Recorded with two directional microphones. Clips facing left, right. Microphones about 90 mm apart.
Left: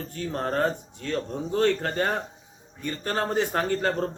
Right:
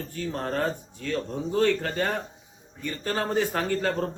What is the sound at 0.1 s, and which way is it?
A man's voice, 40° left (ahead or behind).